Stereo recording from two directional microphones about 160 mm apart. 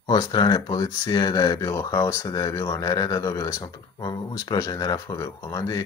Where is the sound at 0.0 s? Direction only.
25° left (ahead or behind).